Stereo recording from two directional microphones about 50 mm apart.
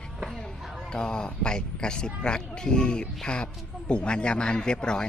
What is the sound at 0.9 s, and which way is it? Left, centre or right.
Speech, centre.